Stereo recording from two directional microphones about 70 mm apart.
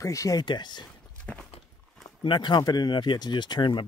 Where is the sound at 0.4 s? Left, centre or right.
Left.